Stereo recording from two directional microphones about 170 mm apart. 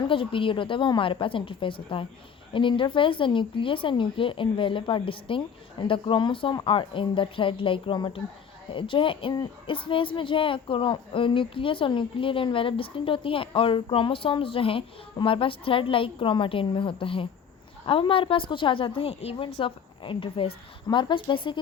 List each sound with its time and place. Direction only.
0.0 s a woman's voice: 30° left (ahead or behind)